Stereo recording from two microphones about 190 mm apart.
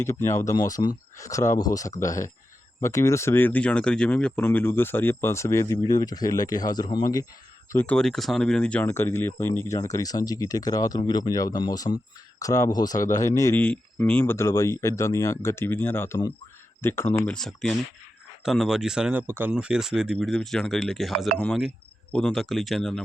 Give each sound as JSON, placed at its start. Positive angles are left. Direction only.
{"t": 0.0, "sound": "speech", "side_deg": 15}
{"t": 7.7, "sound": "speech", "side_deg": 10}